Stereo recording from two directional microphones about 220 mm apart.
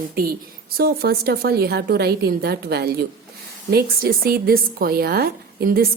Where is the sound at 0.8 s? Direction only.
45° right (ahead or behind).